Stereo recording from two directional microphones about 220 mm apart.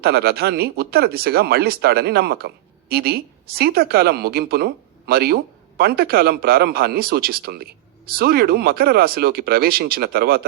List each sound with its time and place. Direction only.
0.0 s speech: 45° right (ahead or behind)